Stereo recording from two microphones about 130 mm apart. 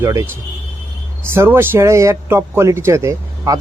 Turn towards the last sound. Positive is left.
turn(degrees=-20)  # may be behind; listen again after turning